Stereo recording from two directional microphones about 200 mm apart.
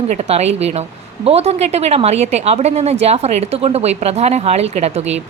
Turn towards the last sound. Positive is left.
turn(degrees=-30)  # may be behind; listen again after turning